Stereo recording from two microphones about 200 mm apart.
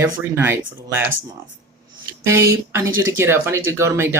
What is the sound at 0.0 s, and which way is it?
Speech, 10° right (ahead or behind).